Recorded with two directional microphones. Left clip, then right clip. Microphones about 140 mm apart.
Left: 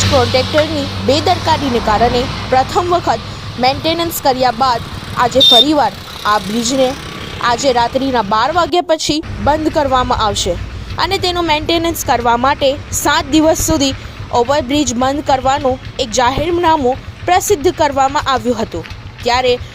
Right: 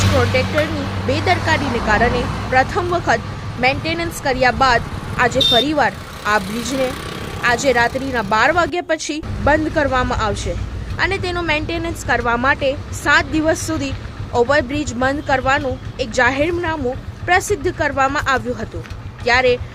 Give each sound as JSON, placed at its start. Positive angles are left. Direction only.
{"t": 0.0, "sound": "speech", "side_deg": 30}